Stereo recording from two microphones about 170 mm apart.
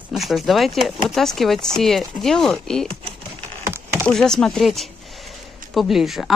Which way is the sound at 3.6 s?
15° right (ahead or behind).